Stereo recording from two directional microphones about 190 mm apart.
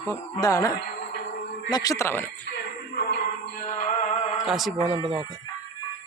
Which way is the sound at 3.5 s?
45° left (ahead or behind).